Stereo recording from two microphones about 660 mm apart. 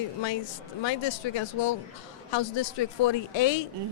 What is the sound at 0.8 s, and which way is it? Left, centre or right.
Speech, left.